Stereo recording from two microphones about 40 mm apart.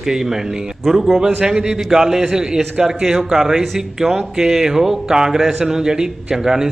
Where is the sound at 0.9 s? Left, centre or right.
Centre.